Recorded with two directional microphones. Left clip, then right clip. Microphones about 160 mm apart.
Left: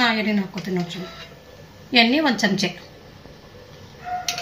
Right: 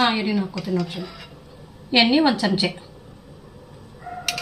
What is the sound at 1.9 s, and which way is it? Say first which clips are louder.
Speech: even; 20° right (ahead or behind).